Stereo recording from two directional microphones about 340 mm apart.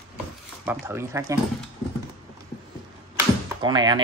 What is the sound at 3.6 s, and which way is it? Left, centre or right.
Speech, centre.